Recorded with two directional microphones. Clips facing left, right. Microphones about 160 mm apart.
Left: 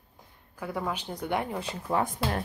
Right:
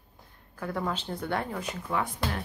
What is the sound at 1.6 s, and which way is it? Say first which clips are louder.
Speech: left 3 dB; 40° left (ahead or behind).